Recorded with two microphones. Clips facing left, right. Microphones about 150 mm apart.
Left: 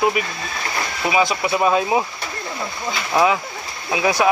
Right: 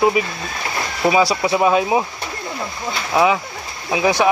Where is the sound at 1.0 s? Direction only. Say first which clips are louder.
Right 5 dB; 35° right (ahead or behind).